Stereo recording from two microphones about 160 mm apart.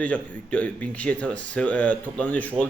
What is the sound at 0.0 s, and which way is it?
A man's voice, 10° left (ahead or behind).